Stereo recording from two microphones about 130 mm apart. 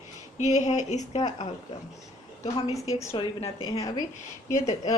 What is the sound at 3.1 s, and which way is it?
Speech, 50° left (ahead or behind).